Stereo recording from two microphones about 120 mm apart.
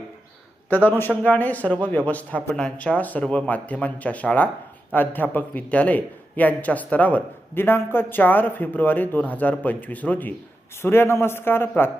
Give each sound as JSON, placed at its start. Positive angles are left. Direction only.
{"t": 0.9, "sound": "a man's voice", "side_deg": 15}